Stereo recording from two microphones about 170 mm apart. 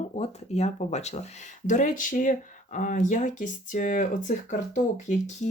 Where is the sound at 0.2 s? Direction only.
40° left (ahead or behind).